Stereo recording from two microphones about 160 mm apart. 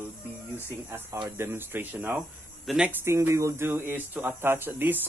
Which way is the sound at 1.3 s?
15° right (ahead or behind).